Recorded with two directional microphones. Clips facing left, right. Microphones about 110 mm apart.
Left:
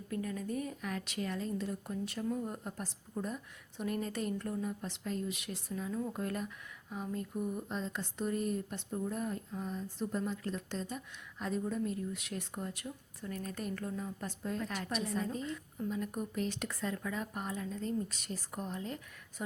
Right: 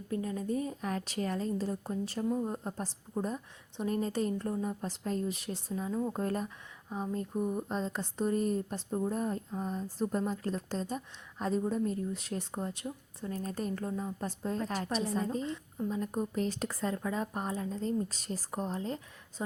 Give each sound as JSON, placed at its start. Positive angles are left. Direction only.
{"t": 0.1, "sound": "speech", "side_deg": -25}